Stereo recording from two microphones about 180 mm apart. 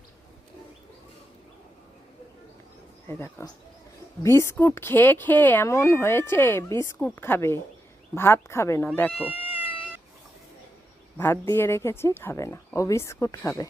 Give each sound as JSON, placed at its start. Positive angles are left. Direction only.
{"t": 3.1, "sound": "speech", "side_deg": 15}
{"t": 9.1, "sound": "speech", "side_deg": -5}
{"t": 9.5, "sound": "cat", "side_deg": 30}
{"t": 11.2, "sound": "speech", "side_deg": 15}